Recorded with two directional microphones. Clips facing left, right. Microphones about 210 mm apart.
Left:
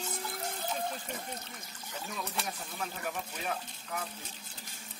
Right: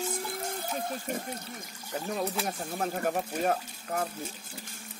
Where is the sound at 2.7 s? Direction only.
50° right (ahead or behind).